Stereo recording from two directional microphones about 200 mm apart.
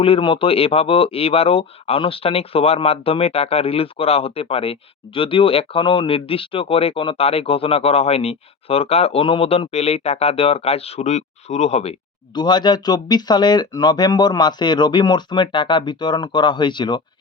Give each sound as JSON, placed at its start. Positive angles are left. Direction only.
{"t": 0.0, "sound": "speech", "side_deg": 25}